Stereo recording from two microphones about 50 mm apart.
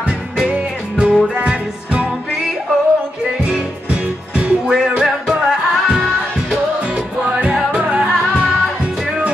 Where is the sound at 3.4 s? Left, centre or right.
Right.